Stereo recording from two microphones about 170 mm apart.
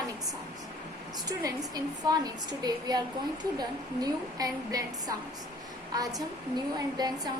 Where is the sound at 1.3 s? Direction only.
20° right (ahead or behind).